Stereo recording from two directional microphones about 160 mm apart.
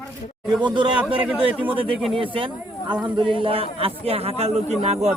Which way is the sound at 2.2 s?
35° right (ahead or behind).